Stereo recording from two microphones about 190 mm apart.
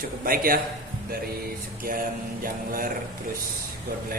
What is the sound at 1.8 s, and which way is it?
A man's voice, 50° right (ahead or behind).